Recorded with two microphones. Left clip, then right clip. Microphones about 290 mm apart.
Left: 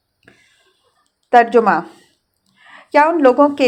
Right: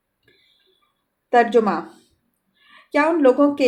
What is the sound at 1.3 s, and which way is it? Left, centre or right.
Speech, centre.